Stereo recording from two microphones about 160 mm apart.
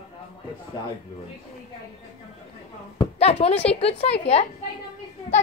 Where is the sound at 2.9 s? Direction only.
40° left (ahead or behind).